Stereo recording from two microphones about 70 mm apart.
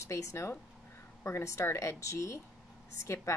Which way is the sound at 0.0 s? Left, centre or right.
Left.